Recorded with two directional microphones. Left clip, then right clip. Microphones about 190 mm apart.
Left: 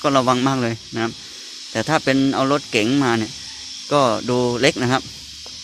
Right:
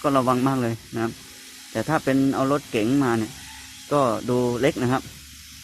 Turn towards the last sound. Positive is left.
turn(degrees=10)  # may be behind; listen again after turning